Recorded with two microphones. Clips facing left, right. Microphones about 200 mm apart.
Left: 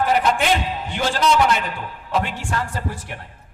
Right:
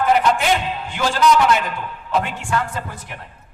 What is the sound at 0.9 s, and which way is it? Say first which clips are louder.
A man's voice: right 2 dB; 40° left (ahead or behind).